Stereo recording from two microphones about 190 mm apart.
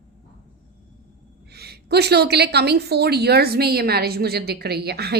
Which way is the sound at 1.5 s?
60° right (ahead or behind).